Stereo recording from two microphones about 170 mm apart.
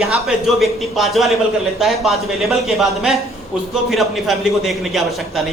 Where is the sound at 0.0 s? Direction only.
Centre (ahead or behind).